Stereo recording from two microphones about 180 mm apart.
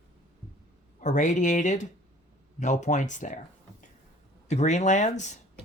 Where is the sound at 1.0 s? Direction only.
45° left (ahead or behind).